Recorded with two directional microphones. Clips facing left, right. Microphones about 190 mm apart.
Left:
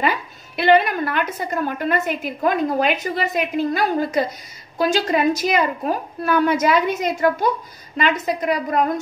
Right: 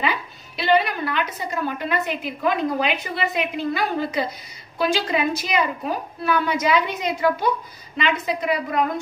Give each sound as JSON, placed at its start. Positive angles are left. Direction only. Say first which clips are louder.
{"t": 0.0, "sound": "a woman's voice", "louder": "left 3 dB", "side_deg": 50}